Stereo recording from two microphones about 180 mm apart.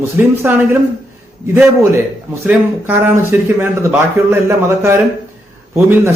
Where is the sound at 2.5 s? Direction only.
10° right (ahead or behind).